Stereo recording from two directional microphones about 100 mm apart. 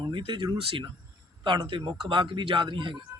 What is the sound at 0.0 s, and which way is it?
Speech, 55° right (ahead or behind).